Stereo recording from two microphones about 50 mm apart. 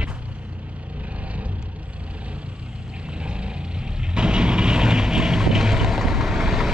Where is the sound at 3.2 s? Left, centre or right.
Right.